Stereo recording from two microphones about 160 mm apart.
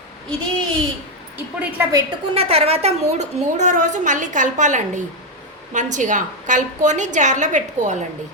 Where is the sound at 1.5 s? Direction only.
15° right (ahead or behind).